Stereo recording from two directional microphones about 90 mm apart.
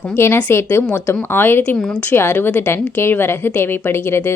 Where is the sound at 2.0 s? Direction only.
25° left (ahead or behind).